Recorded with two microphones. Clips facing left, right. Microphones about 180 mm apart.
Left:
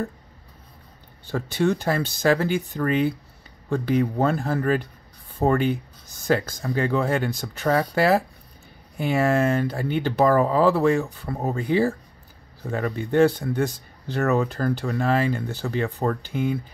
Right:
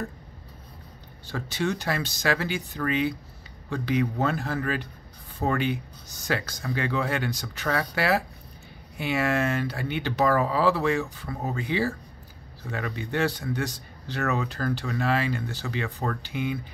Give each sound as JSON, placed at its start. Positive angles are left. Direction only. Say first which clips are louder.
{"t": 1.3, "sound": "speech", "louder": "left 6 dB", "side_deg": 50}